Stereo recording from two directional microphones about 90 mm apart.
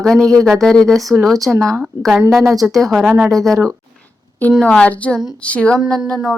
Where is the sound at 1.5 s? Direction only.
35° right (ahead or behind).